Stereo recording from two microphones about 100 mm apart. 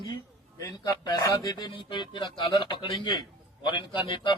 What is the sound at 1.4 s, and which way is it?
A man's voice, 40° left (ahead or behind).